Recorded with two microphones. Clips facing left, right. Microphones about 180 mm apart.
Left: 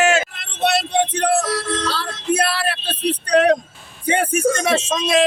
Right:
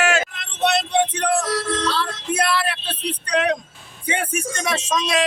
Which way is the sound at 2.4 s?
35° left (ahead or behind).